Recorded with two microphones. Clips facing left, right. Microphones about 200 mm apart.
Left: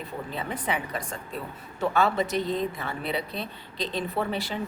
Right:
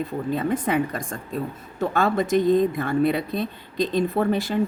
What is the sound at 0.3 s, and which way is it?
A woman's voice, 45° right (ahead or behind).